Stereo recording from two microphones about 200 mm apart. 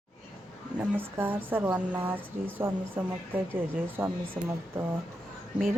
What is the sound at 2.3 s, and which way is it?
Speech, 40° right (ahead or behind).